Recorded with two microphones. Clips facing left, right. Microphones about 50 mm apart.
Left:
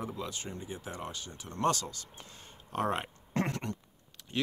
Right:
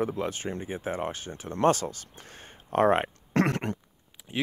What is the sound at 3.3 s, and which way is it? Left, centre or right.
Throat clearing, right.